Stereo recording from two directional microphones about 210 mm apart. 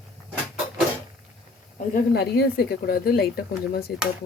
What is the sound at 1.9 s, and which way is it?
Speech, 50° left (ahead or behind).